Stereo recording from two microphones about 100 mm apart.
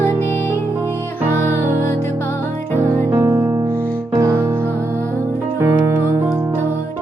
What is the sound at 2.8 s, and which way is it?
Music, 25° right (ahead or behind).